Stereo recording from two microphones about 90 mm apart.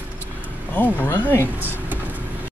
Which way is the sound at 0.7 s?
20° left (ahead or behind).